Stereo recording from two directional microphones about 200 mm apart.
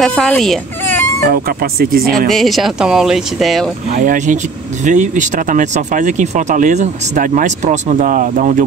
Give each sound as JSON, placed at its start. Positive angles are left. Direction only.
{"t": 0.0, "sound": "speech", "side_deg": 5}
{"t": 1.2, "sound": "speech", "side_deg": -50}
{"t": 2.2, "sound": "speech", "side_deg": 0}
{"t": 3.9, "sound": "speech", "side_deg": -40}